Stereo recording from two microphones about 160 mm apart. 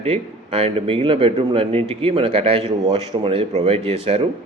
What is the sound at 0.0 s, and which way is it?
Speech, 40° right (ahead or behind).